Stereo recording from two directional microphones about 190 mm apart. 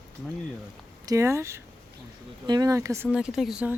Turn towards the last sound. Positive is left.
turn(degrees=-5)  # may be behind; listen again after turning